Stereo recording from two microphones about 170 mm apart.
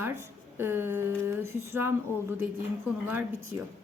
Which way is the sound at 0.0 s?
15° right (ahead or behind).